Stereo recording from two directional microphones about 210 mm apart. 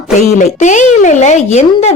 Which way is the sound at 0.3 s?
35° left (ahead or behind).